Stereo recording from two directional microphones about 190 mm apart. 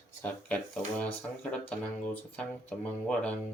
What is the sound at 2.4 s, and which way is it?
Speech, 5° left (ahead or behind).